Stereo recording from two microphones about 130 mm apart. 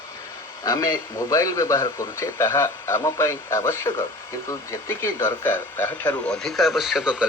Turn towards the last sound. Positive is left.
turn(degrees=-5)  # may be behind; listen again after turning